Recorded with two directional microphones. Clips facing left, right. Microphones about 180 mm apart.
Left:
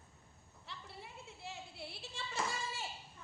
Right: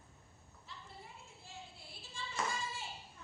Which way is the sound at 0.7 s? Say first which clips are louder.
Left 2 dB; 70° left (ahead or behind).